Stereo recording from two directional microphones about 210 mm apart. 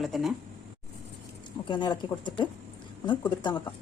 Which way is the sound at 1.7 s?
20° left (ahead or behind).